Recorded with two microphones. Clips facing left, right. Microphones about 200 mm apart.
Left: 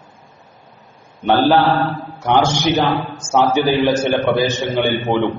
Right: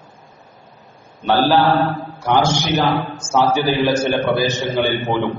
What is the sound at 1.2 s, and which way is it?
A man's voice, 15° left (ahead or behind).